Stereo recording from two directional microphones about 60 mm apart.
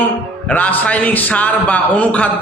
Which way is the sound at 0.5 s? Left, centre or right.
Left.